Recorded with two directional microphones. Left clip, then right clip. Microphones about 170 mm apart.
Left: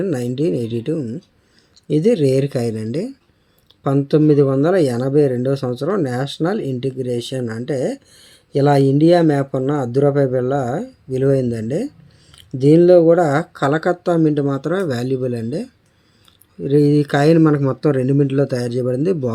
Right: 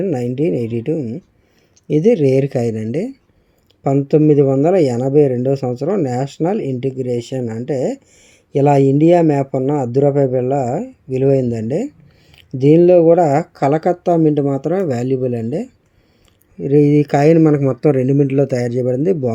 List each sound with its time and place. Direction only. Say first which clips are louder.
0.0 s speech: right 2 dB; 5° right (ahead or behind)
6.6 s speech: right 2 dB; 40° left (ahead or behind)
8.5 s speech: right 2 dB; 10° right (ahead or behind)
12.7 s speech: right 1 dB; 10° right (ahead or behind)